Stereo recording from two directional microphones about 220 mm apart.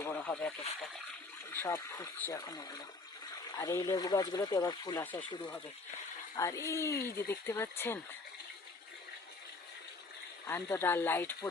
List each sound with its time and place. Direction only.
0.0 s a sound: 5° left (ahead or behind)
1.5 s speech: 15° left (ahead or behind)
10.4 s speech: 10° left (ahead or behind)